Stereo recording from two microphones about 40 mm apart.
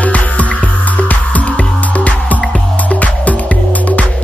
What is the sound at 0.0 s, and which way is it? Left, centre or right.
Music, left.